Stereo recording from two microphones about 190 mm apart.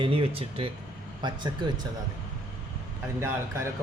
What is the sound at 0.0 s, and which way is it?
Speech, 30° right (ahead or behind).